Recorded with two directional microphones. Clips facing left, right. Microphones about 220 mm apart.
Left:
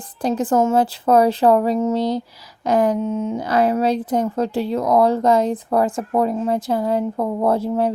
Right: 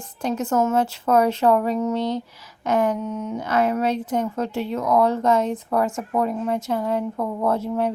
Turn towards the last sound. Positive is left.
turn(degrees=35)  # may be behind; listen again after turning